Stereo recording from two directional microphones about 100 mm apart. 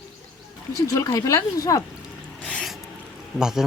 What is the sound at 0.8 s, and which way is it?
Speech, 40° left (ahead or behind).